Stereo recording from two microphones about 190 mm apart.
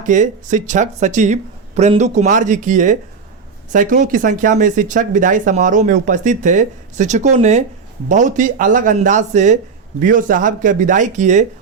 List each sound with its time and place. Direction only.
0.0 s speech: 40° right (ahead or behind)